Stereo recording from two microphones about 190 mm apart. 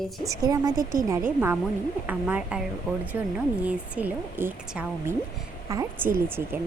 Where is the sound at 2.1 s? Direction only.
10° right (ahead or behind).